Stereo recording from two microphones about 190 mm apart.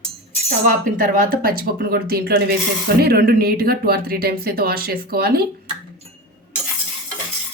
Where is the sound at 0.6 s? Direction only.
45° right (ahead or behind).